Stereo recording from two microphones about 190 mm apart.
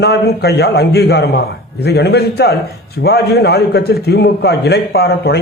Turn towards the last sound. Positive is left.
turn(degrees=60)  # may be behind; listen again after turning